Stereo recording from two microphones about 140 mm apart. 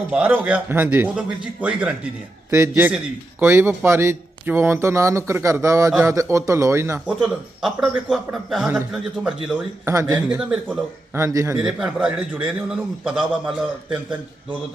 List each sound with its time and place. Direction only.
0.1 s speech: 10° right (ahead or behind)
7.1 s a man's voice: 5° right (ahead or behind)
9.8 s speech: 20° right (ahead or behind)
10.2 s speech: 5° right (ahead or behind)
11.1 s speech: 20° right (ahead or behind)
11.5 s speech: 5° right (ahead or behind)